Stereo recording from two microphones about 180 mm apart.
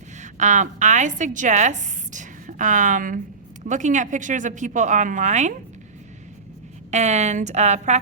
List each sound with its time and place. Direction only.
0.2 s a woman's voice: 40° right (ahead or behind)
6.9 s a woman's voice: 40° right (ahead or behind)